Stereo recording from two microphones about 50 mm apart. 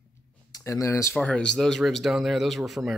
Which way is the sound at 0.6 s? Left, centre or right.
Left.